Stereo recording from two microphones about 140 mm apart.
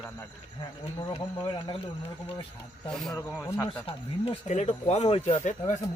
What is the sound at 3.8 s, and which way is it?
Speech, 45° left (ahead or behind).